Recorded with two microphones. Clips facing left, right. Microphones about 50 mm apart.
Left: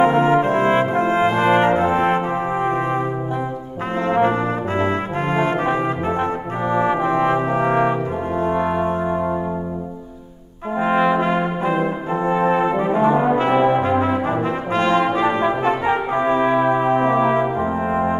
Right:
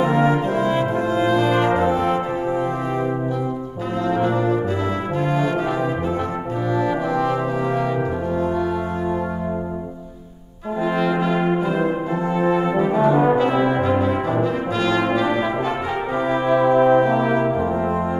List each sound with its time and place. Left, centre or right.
0.0 s brass instrument: left
4.1 s brass instrument: left
10.8 s brass instrument: left